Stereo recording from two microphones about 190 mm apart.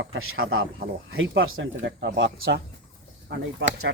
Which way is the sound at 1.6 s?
65° right (ahead or behind).